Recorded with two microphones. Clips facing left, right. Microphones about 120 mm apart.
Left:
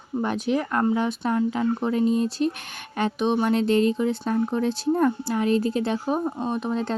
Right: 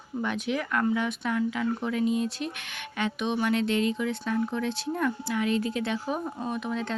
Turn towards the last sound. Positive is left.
turn(degrees=35)  # may be behind; listen again after turning